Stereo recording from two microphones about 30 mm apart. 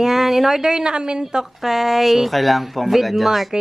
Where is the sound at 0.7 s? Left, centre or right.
Right.